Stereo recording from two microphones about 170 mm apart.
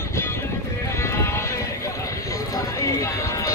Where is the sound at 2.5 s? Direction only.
20° left (ahead or behind).